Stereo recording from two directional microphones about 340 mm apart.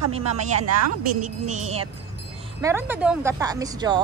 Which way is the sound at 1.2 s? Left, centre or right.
Right.